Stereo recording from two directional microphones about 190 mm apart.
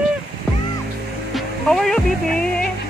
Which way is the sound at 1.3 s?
5° left (ahead or behind).